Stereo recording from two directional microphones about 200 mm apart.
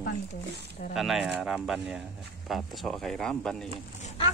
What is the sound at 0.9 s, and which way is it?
Speech, centre (ahead or behind).